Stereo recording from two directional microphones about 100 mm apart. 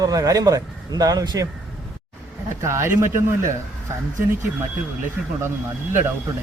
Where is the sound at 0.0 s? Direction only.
35° right (ahead or behind).